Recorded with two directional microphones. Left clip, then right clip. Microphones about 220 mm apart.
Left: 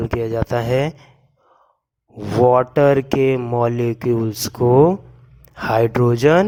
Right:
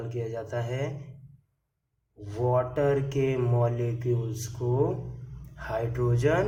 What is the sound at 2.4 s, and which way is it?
A man's voice, 45° left (ahead or behind).